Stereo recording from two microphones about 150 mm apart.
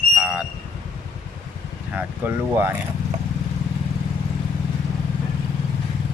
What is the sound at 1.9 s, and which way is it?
Speech, 10° right (ahead or behind).